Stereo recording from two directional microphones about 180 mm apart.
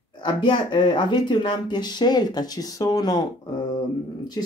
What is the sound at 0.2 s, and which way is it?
Speech, 25° left (ahead or behind).